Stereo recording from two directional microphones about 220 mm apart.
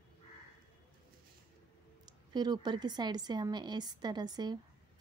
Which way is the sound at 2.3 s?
20° right (ahead or behind).